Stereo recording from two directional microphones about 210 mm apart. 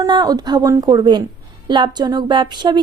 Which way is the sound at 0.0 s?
20° right (ahead or behind).